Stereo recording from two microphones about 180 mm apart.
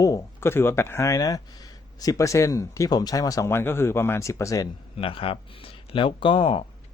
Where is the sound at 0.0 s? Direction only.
15° left (ahead or behind).